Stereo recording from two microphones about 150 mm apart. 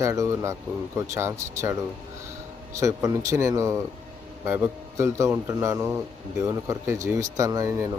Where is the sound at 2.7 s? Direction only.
20° right (ahead or behind).